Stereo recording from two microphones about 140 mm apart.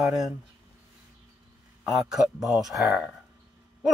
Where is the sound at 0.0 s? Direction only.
Centre (ahead or behind).